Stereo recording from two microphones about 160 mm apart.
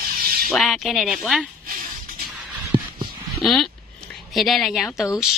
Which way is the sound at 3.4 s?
Centre (ahead or behind).